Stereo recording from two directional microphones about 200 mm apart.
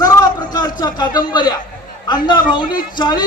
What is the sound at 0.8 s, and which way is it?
A man's voice, 20° left (ahead or behind).